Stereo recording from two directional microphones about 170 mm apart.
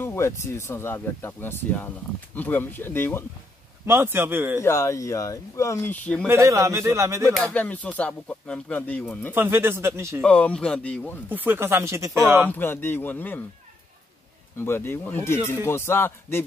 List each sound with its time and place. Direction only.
0.0 s a sound: 15° left (ahead or behind)
0.5 s speech: 15° left (ahead or behind)
3.8 s speech: 15° right (ahead or behind)
4.6 s speech: 15° left (ahead or behind)
6.2 s speech: 15° right (ahead or behind)
7.3 s speech: 5° left (ahead or behind)
9.3 s speech: 10° right (ahead or behind)
10.2 s speech: 5° left (ahead or behind)
11.2 s speech: 10° right (ahead or behind)
12.4 s speech: 10° left (ahead or behind)
14.6 s speech: 15° left (ahead or behind)